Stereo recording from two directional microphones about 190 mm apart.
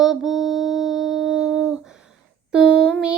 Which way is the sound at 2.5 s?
5° right (ahead or behind).